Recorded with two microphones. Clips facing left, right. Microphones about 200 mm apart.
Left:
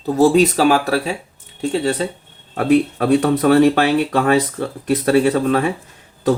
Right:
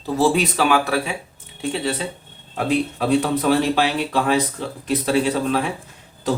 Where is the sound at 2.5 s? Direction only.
60° left (ahead or behind).